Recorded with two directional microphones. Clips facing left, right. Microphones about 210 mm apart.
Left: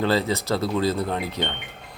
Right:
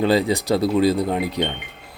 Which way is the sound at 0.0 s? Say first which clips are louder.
Right 4 dB; 15° right (ahead or behind).